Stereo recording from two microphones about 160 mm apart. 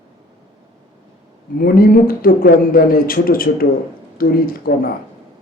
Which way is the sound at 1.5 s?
65° left (ahead or behind).